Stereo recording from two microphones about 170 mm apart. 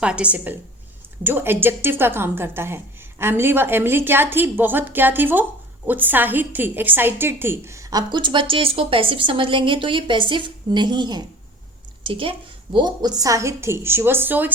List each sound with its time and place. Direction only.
0.0 s a woman's voice: 5° right (ahead or behind)